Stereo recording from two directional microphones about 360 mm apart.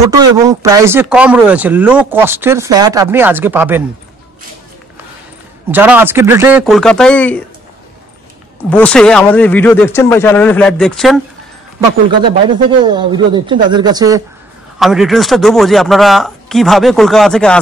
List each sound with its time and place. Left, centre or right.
0.1 s speech: centre
5.7 s speech: centre
8.6 s speech: centre
12.8 s speech: centre